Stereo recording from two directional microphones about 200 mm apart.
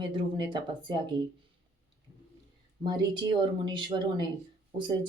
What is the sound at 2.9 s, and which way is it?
Speech, 20° right (ahead or behind).